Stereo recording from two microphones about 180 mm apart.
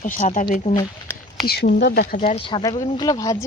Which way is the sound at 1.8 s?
65° left (ahead or behind).